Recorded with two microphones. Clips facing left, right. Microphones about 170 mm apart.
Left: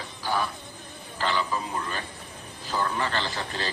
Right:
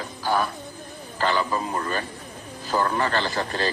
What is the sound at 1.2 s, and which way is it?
Speech, 50° right (ahead or behind).